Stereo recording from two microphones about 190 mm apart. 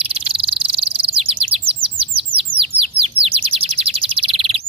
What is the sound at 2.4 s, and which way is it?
Bird, 30° right (ahead or behind).